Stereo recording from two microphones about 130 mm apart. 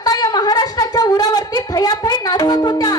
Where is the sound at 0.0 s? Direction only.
30° left (ahead or behind).